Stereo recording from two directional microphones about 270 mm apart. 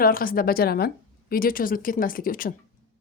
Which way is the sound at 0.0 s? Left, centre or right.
Left.